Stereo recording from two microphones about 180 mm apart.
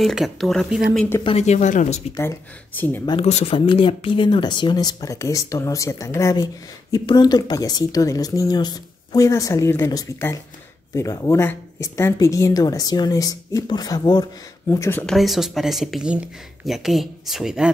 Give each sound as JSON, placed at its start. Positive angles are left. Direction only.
{"t": 0.0, "sound": "speech", "side_deg": 0}
{"t": 1.2, "sound": "speech", "side_deg": 35}
{"t": 2.1, "sound": "speech", "side_deg": 10}
{"t": 3.1, "sound": "speech", "side_deg": 35}
{"t": 15.1, "sound": "speech", "side_deg": 0}